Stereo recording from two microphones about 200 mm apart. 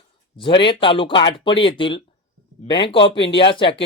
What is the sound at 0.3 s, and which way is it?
Speech, 25° left (ahead or behind).